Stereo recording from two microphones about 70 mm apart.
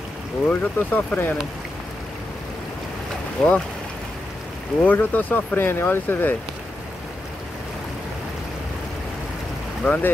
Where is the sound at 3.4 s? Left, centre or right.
Centre.